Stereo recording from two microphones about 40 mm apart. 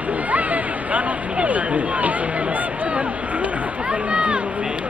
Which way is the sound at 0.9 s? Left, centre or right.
Right.